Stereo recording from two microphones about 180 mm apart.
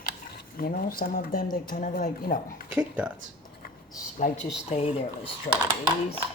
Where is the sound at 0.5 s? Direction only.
55° left (ahead or behind).